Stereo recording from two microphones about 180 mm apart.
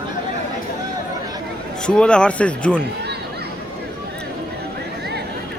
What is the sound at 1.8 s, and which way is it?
Speech, 5° left (ahead or behind).